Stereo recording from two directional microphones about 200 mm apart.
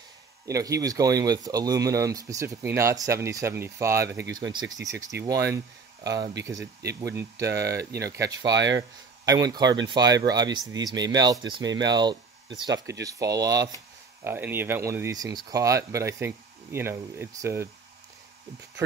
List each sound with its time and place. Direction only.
0.5 s speech: 15° right (ahead or behind)